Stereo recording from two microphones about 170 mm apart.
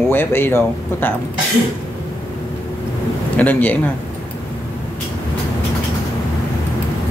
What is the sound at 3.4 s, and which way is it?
Speech, 10° left (ahead or behind).